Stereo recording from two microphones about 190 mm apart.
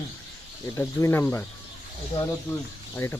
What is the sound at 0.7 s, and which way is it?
Speech, 15° left (ahead or behind).